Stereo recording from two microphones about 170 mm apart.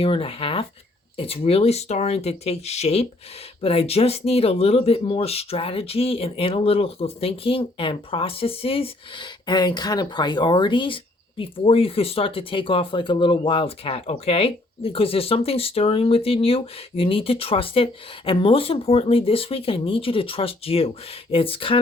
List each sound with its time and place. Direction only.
0.0 s speech: 35° left (ahead or behind)